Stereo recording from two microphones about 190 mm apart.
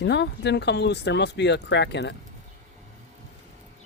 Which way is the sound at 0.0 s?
65° left (ahead or behind).